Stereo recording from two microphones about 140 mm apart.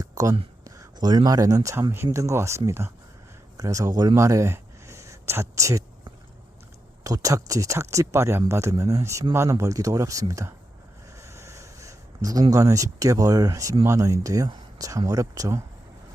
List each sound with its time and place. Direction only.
0.0 s speech: 25° right (ahead or behind)
7.0 s speech: 25° right (ahead or behind)
11.2 s a sound: 20° right (ahead or behind)
13.8 s speech: 20° right (ahead or behind)